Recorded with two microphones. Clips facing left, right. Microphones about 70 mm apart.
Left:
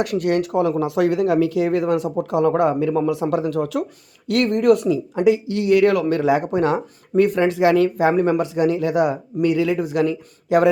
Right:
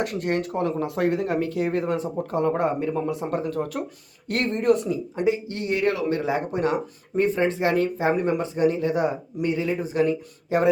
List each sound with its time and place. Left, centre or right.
0.0 s speech: left